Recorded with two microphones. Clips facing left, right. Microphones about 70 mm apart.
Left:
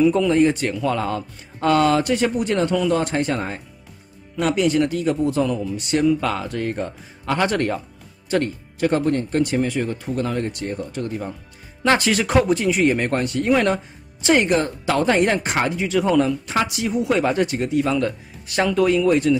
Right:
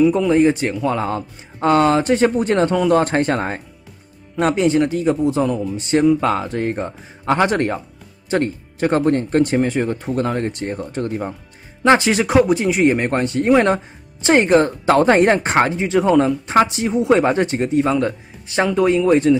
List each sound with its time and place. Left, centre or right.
0.0 s speech: centre; by 3.6 s right
4.4 s speech: right
11.8 s speech: right